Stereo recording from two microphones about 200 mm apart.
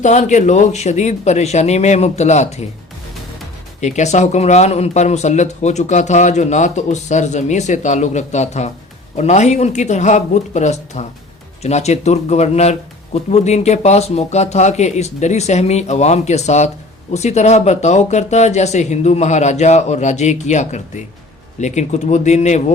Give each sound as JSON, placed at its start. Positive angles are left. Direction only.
{"t": 0.0, "sound": "speech", "side_deg": 35}
{"t": 3.8, "sound": "speech", "side_deg": 35}